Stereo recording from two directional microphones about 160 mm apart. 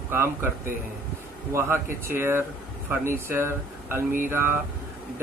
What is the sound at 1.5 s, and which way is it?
Speech, 15° right (ahead or behind).